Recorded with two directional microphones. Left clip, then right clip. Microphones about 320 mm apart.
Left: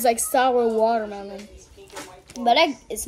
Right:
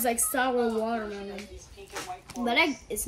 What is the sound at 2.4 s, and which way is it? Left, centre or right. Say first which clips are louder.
Speech: left 7 dB; centre.